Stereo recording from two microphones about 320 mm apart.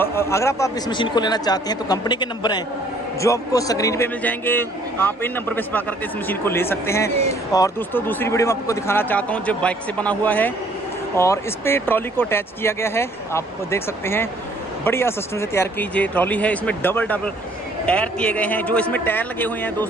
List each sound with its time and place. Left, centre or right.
0.0 s a man's voice: centre